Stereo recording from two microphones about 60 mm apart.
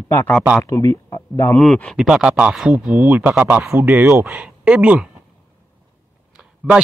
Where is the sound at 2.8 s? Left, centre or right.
Right.